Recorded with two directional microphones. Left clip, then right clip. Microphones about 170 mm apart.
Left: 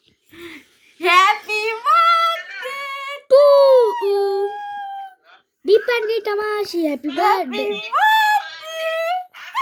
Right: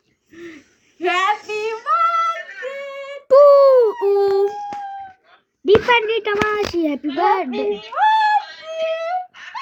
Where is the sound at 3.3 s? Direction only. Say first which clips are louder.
Right 1 dB; 5° right (ahead or behind).